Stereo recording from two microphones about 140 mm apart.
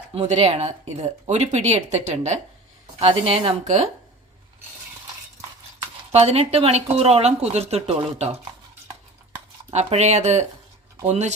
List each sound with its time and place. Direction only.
0.3 s speech: 50° right (ahead or behind)
3.0 s speech: 45° right (ahead or behind)
6.1 s speech: 45° right (ahead or behind)
9.7 s speech: 55° right (ahead or behind)